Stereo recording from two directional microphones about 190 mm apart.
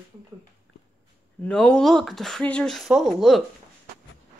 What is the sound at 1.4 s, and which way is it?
Speech, 5° left (ahead or behind).